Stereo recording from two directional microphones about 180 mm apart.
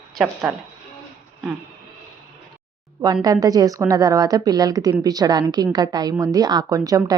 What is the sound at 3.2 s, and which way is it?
A woman's voice, 20° right (ahead or behind).